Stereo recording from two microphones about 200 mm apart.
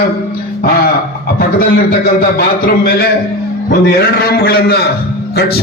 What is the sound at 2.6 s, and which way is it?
Speech, 50° left (ahead or behind).